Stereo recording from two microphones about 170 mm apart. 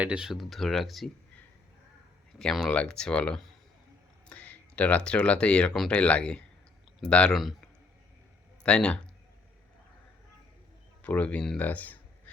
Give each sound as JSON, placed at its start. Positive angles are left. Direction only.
{"t": 0.0, "sound": "speech", "side_deg": -5}
{"t": 8.6, "sound": "speech", "side_deg": 5}
{"t": 11.0, "sound": "speech", "side_deg": 10}